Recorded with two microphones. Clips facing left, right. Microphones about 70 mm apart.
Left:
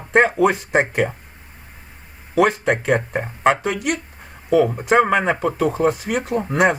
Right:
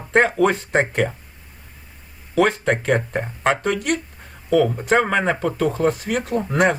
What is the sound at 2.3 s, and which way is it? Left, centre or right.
Speech, centre.